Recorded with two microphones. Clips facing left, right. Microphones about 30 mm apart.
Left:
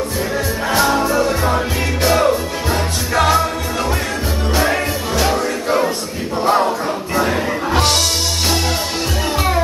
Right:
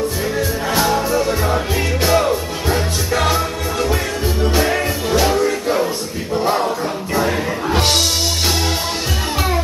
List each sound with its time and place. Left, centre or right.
0.7 s music: centre
0.9 s music: centre
2.0 s music: centre
4.6 s music: centre
7.2 s music: centre